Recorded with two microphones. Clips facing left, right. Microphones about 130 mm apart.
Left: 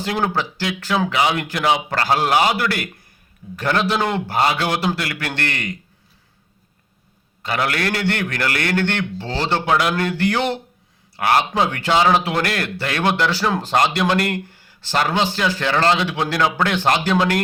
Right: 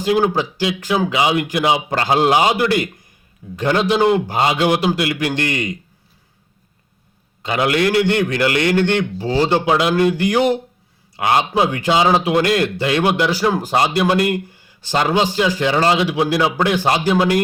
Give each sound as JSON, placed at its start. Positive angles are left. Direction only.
{"t": 0.0, "sound": "speech", "side_deg": -15}
{"t": 7.4, "sound": "speech", "side_deg": -15}